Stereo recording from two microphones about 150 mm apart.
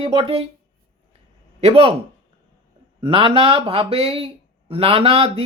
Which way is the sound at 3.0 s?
35° right (ahead or behind).